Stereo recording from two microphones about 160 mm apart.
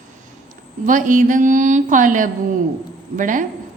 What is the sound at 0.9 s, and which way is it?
Mantra, 55° right (ahead or behind).